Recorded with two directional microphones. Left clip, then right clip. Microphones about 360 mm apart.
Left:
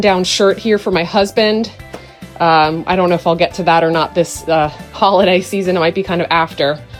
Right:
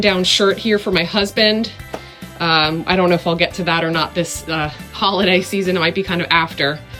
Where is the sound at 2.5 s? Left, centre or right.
Centre.